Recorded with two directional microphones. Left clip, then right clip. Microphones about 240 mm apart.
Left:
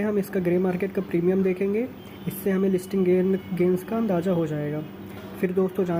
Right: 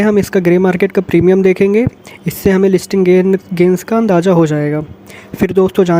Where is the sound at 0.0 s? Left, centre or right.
Right.